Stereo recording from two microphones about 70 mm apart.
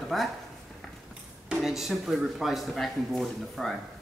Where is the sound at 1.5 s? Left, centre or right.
Centre.